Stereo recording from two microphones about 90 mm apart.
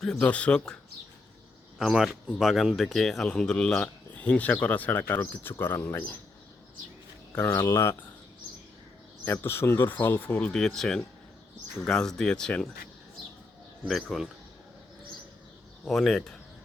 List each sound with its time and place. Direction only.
0.0 s speech: 10° left (ahead or behind)
1.8 s speech: 5° right (ahead or behind); by 6.1 s 25° left (ahead or behind)
7.3 s speech: 30° left (ahead or behind)
9.2 s speech: 25° left (ahead or behind)
10.5 s speech: 5° left (ahead or behind)
13.8 s speech: centre (ahead or behind)
15.8 s speech: 5° left (ahead or behind)